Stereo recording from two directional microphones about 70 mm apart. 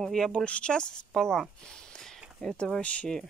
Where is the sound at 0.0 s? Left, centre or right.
Centre.